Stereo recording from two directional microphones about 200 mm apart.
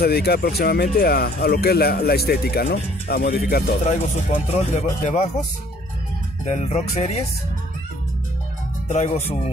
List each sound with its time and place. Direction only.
0.0 s speech: 50° left (ahead or behind)
3.8 s speech: 40° left (ahead or behind)
6.4 s speech: 35° left (ahead or behind)
8.8 s speech: 35° left (ahead or behind)